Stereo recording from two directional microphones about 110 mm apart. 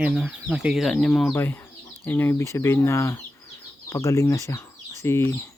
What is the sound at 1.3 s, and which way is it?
Speech, 20° left (ahead or behind).